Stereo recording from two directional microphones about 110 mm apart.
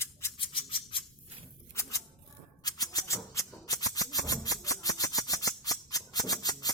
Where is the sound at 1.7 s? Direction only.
30° left (ahead or behind).